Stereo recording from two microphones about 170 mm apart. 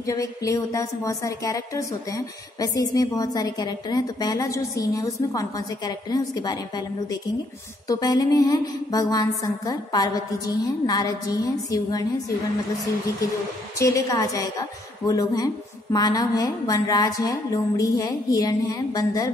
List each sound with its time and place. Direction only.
0.0 s a woman's voice: 20° left (ahead or behind)
7.9 s a woman's voice: 20° left (ahead or behind)
13.7 s a woman's voice: 20° left (ahead or behind)